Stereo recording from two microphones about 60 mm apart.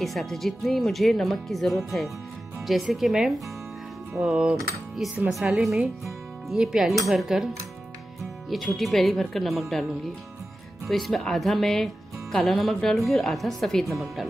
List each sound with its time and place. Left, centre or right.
0.0 s speech: centre
4.2 s music: centre
5.3 s speech: centre
6.0 s music: centre
7.1 s speech: centre
8.2 s music: centre
8.7 s speech: centre
10.9 s speech: centre